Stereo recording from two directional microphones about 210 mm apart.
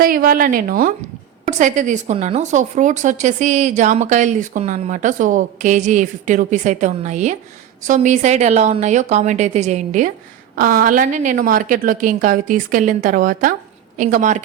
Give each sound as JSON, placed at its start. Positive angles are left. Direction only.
{"t": 0.0, "sound": "a woman's voice", "side_deg": -45}